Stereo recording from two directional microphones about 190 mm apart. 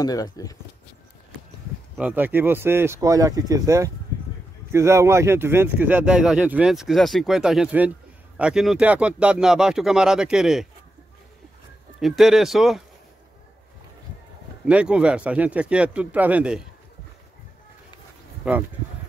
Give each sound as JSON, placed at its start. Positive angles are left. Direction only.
{"t": 0.0, "sound": "speech", "side_deg": 20}
{"t": 2.0, "sound": "speech", "side_deg": -10}
{"t": 12.0, "sound": "speech", "side_deg": 0}
{"t": 14.7, "sound": "speech", "side_deg": -5}
{"t": 18.4, "sound": "speech", "side_deg": -5}